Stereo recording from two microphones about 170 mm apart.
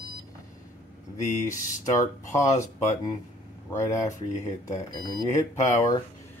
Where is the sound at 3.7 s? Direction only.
20° left (ahead or behind).